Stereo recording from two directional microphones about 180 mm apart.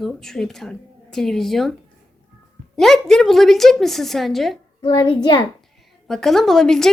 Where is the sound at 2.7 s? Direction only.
Centre (ahead or behind).